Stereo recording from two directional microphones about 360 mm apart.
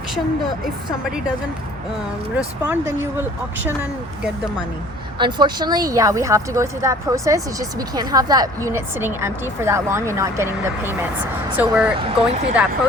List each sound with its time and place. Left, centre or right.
2.6 s speech: centre
5.2 s speech: centre